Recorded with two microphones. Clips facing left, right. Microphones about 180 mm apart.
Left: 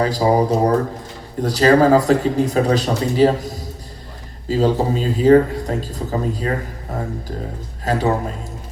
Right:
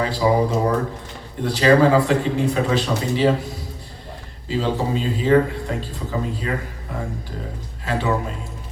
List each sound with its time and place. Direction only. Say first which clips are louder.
0.0 s speech: left 3 dB; 40° left (ahead or behind)